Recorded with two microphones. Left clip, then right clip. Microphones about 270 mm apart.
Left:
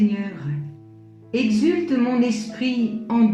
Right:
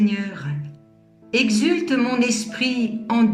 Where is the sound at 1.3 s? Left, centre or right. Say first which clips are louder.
Right 1 dB; right.